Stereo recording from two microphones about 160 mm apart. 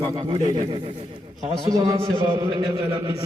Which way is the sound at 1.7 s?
20° right (ahead or behind).